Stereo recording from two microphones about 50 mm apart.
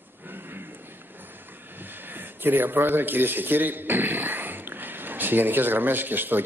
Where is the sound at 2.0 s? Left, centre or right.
Right.